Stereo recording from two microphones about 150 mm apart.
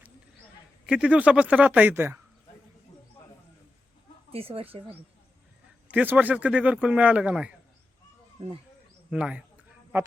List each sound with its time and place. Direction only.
0.9 s speech: 5° right (ahead or behind)
4.3 s speech: 40° right (ahead or behind)
5.9 s speech: 10° right (ahead or behind)
9.0 s speech: 5° right (ahead or behind)